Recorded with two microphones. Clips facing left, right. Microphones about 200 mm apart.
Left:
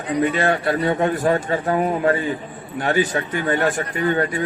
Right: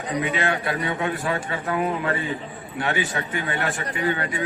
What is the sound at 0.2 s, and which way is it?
A man's voice, 50° left (ahead or behind).